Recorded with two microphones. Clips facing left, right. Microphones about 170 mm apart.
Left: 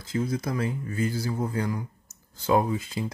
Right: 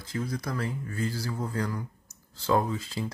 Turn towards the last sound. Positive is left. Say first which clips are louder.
# left 3 dB
turn(degrees=20)  # may be behind; listen again after turning